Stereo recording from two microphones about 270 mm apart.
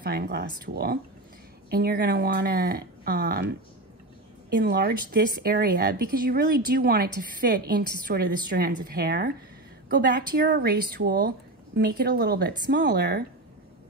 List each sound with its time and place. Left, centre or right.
0.0 s a woman's voice: right